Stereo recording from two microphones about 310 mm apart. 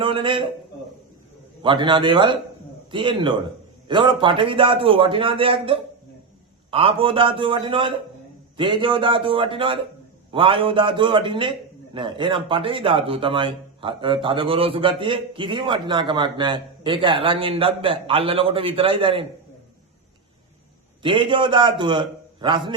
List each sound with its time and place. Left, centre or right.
0.0 s speech: centre
1.6 s speech: centre
21.0 s speech: centre